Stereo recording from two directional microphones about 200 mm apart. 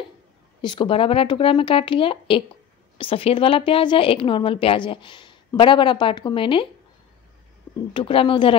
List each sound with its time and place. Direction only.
0.6 s a woman's voice: 25° left (ahead or behind)
7.9 s a woman's voice: 25° left (ahead or behind)